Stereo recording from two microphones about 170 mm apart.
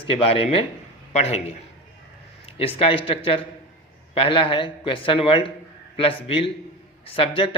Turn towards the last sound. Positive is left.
turn(degrees=30)  # may be behind; listen again after turning